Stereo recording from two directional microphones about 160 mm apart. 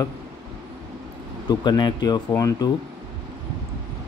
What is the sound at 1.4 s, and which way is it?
Speech, 25° left (ahead or behind).